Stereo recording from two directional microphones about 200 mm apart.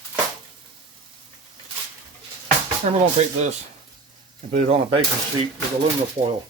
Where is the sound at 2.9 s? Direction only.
35° right (ahead or behind).